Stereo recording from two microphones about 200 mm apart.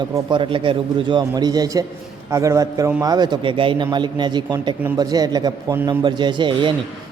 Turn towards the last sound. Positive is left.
turn(degrees=-25)  # may be behind; listen again after turning